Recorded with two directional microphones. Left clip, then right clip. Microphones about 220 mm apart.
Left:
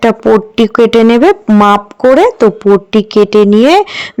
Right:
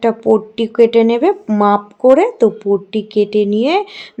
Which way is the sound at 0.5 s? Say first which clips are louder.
Left 4 dB; 25° left (ahead or behind).